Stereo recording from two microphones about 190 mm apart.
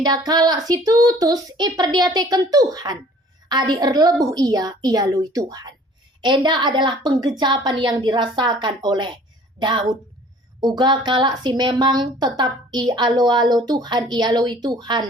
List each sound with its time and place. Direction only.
0.0 s speech: 20° right (ahead or behind)